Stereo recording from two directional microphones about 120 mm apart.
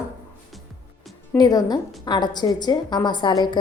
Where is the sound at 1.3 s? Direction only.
30° left (ahead or behind).